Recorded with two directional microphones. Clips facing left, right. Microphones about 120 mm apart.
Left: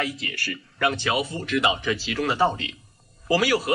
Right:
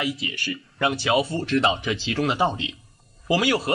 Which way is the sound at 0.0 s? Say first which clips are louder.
Right 1 dB; 15° right (ahead or behind).